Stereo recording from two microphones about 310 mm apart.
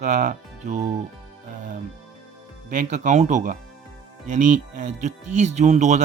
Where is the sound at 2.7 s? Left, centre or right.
Right.